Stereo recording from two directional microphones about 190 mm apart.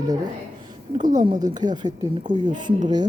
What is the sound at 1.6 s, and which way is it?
Speech, 20° right (ahead or behind).